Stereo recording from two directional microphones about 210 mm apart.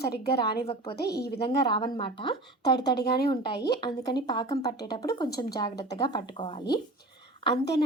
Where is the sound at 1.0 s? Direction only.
50° left (ahead or behind).